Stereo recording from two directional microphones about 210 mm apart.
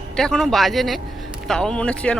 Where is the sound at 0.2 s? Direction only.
Centre (ahead or behind).